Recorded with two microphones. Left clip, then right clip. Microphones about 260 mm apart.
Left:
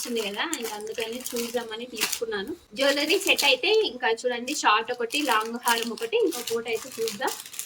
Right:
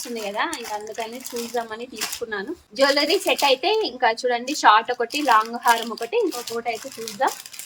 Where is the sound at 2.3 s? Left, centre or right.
Centre.